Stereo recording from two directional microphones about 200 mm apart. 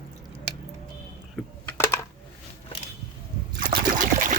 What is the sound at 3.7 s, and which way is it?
Trickle, 40° right (ahead or behind).